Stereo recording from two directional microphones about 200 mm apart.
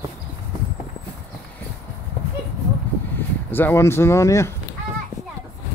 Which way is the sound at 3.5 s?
10° left (ahead or behind).